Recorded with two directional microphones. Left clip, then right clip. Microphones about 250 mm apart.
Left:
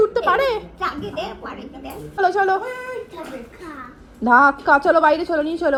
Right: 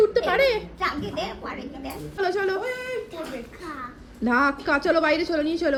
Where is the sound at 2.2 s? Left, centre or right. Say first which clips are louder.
Left 7 dB; centre.